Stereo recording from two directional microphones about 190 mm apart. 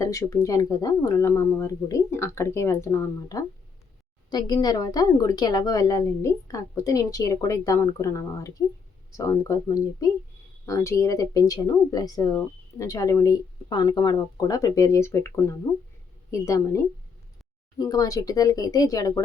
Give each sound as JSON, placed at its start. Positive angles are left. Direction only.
{"t": 0.0, "sound": "a woman's voice", "side_deg": 15}